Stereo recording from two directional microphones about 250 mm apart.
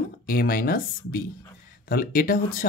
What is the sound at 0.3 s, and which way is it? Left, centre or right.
Speech, left.